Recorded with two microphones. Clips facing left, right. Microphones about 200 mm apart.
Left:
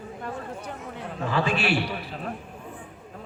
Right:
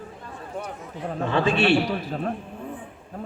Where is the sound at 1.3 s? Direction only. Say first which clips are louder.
Right 4 dB; 25° right (ahead or behind).